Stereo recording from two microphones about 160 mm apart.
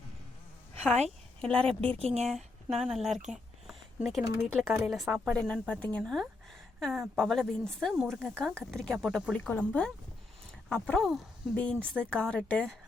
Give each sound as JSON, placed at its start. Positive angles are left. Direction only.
{"t": 1.4, "sound": "a woman's voice", "side_deg": 5}
{"t": 2.0, "sound": "speech", "side_deg": -40}
{"t": 2.3, "sound": "speech", "side_deg": -5}
{"t": 5.3, "sound": "speech", "side_deg": 5}